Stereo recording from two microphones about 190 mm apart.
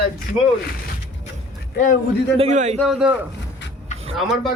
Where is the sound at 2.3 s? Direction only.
35° right (ahead or behind).